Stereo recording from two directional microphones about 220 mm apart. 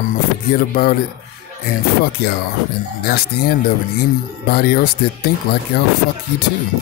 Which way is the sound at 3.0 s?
45° left (ahead or behind).